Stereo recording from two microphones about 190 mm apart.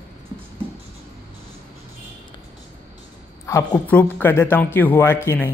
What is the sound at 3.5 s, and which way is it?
Speech, 20° left (ahead or behind).